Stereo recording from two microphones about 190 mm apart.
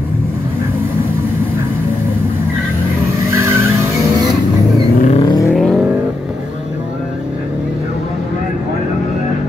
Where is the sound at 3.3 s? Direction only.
15° right (ahead or behind).